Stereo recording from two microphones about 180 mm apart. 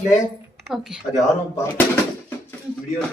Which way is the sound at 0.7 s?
Centre (ahead or behind).